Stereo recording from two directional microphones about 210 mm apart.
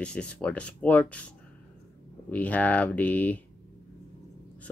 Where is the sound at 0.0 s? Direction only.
5° left (ahead or behind).